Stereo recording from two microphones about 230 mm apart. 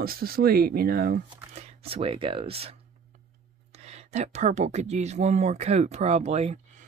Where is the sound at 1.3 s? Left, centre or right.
Right.